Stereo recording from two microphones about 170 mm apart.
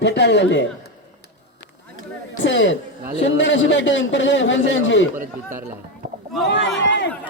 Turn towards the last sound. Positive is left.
turn(degrees=90)